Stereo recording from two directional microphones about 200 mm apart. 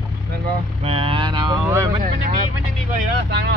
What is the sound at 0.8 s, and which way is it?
Vehicle, 30° right (ahead or behind).